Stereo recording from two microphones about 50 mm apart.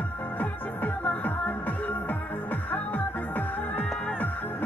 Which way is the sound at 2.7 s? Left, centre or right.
Left.